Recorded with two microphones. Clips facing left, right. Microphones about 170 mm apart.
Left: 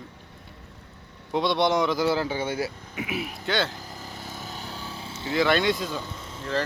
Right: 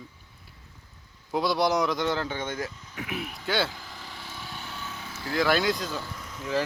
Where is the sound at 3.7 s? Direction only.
40° left (ahead or behind).